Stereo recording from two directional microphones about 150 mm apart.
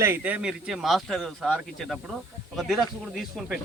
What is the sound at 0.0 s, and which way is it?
Speech, 15° right (ahead or behind).